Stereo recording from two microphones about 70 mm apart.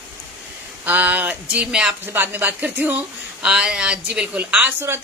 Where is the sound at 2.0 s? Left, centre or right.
Right.